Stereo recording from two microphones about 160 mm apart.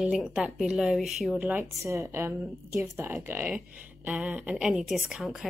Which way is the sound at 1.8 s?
20° right (ahead or behind).